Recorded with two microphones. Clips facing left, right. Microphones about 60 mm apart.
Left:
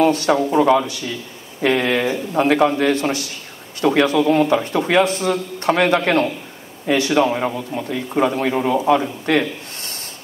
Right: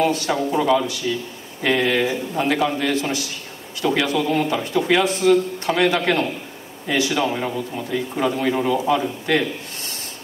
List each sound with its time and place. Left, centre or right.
0.0 s a man's voice: left